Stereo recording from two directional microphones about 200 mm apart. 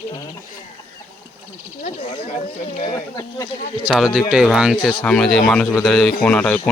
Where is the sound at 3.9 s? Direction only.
Centre (ahead or behind).